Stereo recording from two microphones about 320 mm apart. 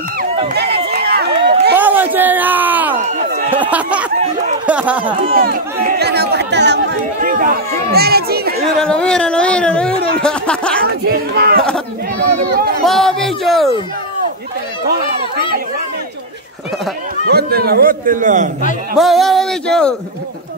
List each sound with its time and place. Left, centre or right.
0.2 s run: right
1.8 s a sound: centre
3.0 s a sound: right
3.7 s speech: centre
5.3 s speech: right
8.8 s speech: centre
10.9 s a man's voice: right
12.8 s speech: centre
17.3 s a man's voice: right
18.9 s speech: centre